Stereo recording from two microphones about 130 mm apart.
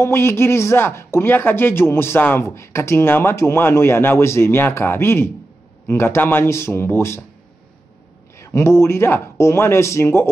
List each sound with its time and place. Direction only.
0.0 s speech: 20° left (ahead or behind)
8.4 s speech: 20° left (ahead or behind)